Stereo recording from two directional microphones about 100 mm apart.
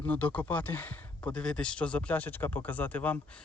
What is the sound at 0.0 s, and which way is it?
Speech, 15° left (ahead or behind).